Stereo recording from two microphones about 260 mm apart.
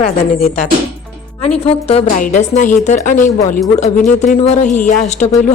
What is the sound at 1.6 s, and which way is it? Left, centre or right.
A woman's voice, left.